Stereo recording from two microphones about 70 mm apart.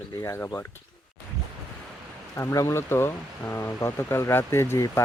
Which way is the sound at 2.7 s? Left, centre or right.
Left.